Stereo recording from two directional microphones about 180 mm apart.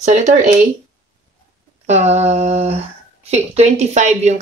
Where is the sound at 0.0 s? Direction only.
40° right (ahead or behind).